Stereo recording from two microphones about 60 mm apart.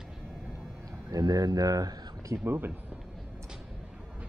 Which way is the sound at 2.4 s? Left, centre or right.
Right.